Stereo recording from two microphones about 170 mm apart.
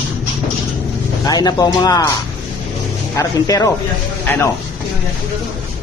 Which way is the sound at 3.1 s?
20° left (ahead or behind).